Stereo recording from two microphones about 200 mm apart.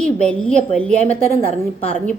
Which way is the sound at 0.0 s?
5° left (ahead or behind).